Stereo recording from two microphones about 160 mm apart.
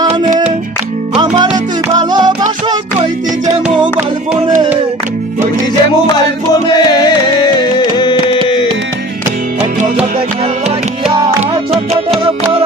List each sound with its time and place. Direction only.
1.1 s music: 30° right (ahead or behind)
6.5 s music: 25° left (ahead or behind)